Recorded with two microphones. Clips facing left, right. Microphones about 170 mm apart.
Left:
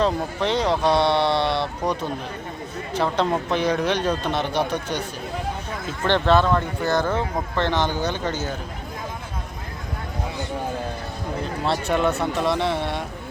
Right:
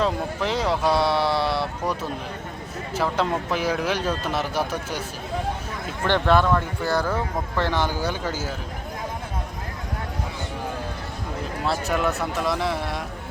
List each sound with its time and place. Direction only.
0.0 s speech: 5° right (ahead or behind)
2.9 s speech: 5° right (ahead or behind)
6.4 s speech: 15° left (ahead or behind)
6.8 s a man's voice: 5° right (ahead or behind)
11.6 s speech: centre (ahead or behind)